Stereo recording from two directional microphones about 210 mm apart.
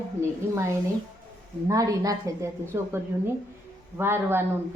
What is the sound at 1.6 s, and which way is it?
A woman's voice, 15° right (ahead or behind).